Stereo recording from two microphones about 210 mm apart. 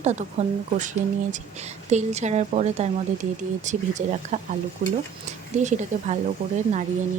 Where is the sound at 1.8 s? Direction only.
35° right (ahead or behind).